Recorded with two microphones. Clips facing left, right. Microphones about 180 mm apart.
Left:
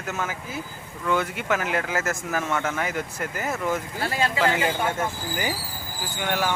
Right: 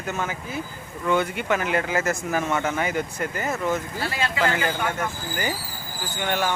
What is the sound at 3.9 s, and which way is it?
Speech, 45° left (ahead or behind).